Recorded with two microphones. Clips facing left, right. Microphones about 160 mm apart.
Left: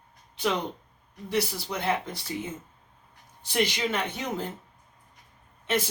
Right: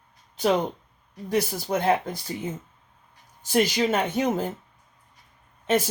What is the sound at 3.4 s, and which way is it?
Speech, 45° right (ahead or behind).